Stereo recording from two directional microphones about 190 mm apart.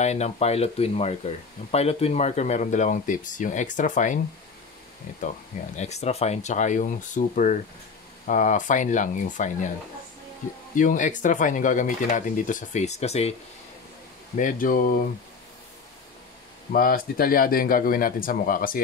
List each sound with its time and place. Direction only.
0.0 s speech: 35° left (ahead or behind)
5.8 s speech: 35° left (ahead or behind)
10.8 s speech: 40° left (ahead or behind)
14.3 s speech: 45° left (ahead or behind)
16.7 s speech: 50° left (ahead or behind)